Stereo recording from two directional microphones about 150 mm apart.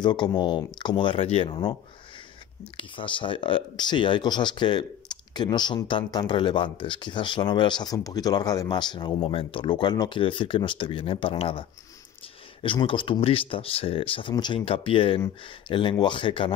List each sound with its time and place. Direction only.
0.0 s speech: 30° left (ahead or behind)
2.8 s speech: 35° left (ahead or behind)
12.6 s speech: 35° left (ahead or behind)